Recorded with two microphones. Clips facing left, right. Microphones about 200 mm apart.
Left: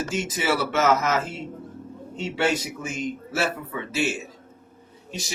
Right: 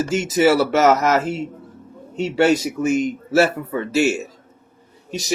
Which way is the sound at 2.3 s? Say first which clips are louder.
Right 8 dB; 45° right (ahead or behind).